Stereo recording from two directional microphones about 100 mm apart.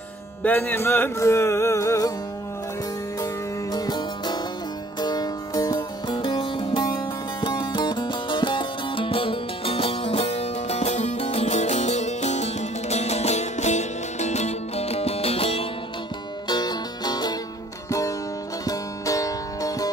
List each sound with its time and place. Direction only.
0.4 s music: 20° left (ahead or behind)
3.7 s music: 45° left (ahead or behind)
6.0 s music: 50° left (ahead or behind); by 11.6 s 90° left
12.9 s music: 90° left; by 15.6 s 75° left (ahead or behind)
16.4 s music: 45° left (ahead or behind)
18.7 s music: 35° left (ahead or behind)